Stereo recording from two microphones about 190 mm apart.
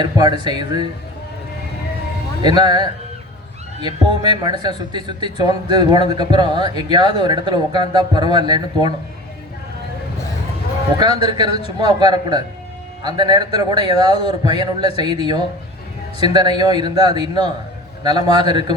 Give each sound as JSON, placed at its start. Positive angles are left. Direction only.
{"t": 0.0, "sound": "speech", "side_deg": -20}
{"t": 2.4, "sound": "speech", "side_deg": -20}
{"t": 11.2, "sound": "speech", "side_deg": -20}